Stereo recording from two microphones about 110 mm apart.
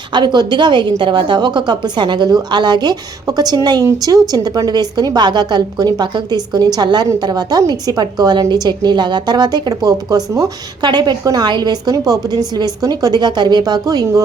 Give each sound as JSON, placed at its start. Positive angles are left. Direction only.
{"t": 0.1, "sound": "a woman's voice", "side_deg": -40}